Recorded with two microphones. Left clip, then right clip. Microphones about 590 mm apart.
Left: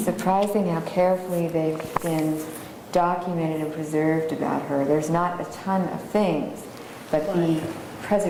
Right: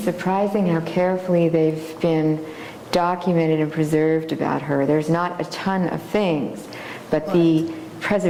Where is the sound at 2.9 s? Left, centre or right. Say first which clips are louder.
Right 3 dB; right.